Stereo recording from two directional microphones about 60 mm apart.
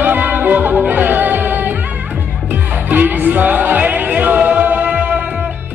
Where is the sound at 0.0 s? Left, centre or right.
Right.